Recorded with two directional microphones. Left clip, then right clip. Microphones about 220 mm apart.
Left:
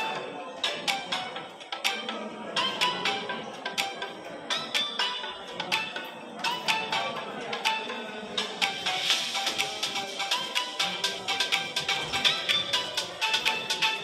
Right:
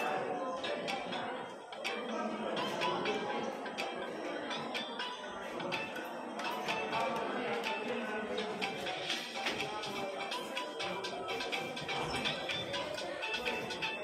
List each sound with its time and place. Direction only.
0.6 s music: 30° left (ahead or behind)
2.5 s music: 30° left (ahead or behind)
4.5 s music: 30° left (ahead or behind)
6.4 s music: 30° left (ahead or behind)
8.4 s music: 30° left (ahead or behind)